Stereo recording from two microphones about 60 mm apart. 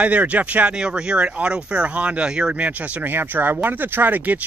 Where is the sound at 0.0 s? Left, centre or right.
Right.